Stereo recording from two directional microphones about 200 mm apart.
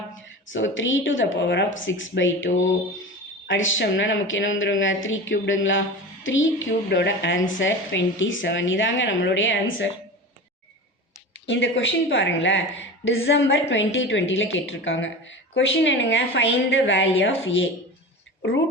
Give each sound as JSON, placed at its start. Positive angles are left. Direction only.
{"t": 0.5, "sound": "a woman's voice", "side_deg": 70}
{"t": 6.2, "sound": "music", "side_deg": 75}
{"t": 6.9, "sound": "a woman's voice", "side_deg": 60}
{"t": 11.4, "sound": "a woman's voice", "side_deg": 65}